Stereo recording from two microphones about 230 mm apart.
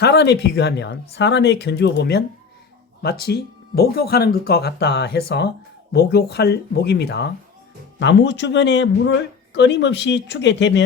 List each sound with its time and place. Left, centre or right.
0.0 s speech: left